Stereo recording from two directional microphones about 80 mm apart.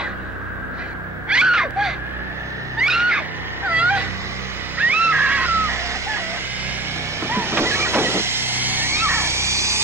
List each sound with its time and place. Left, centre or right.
1.3 s a sound: centre
2.8 s screaming: centre
3.6 s cat: centre
4.7 s music: right
7.2 s vehicle: right